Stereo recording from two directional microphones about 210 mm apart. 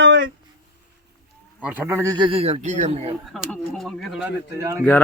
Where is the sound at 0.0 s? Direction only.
55° right (ahead or behind).